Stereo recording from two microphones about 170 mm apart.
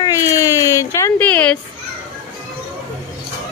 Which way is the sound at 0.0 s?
20° left (ahead or behind).